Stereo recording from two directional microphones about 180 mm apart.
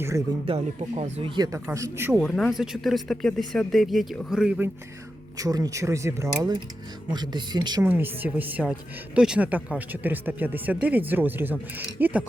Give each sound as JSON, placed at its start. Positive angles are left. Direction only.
{"t": 0.4, "sound": "speech", "side_deg": -35}
{"t": 1.2, "sound": "speech", "side_deg": -20}
{"t": 2.2, "sound": "speech", "side_deg": 5}
{"t": 5.4, "sound": "speech", "side_deg": -20}
{"t": 7.9, "sound": "speech", "side_deg": -10}